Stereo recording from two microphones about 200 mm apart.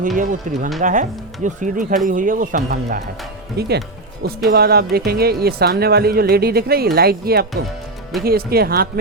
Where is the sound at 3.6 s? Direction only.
55° right (ahead or behind).